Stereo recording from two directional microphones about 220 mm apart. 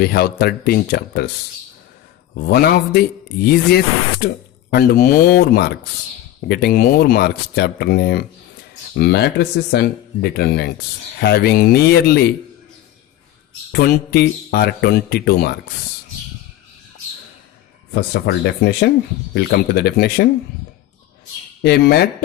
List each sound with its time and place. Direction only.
0.0 s speech: 45° left (ahead or behind)
2.5 s speech: 45° left (ahead or behind)
13.7 s speech: 45° left (ahead or behind)
17.9 s speech: 45° left (ahead or behind)
21.6 s speech: 50° left (ahead or behind)